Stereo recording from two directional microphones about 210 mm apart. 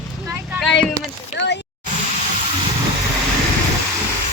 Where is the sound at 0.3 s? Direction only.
10° right (ahead or behind).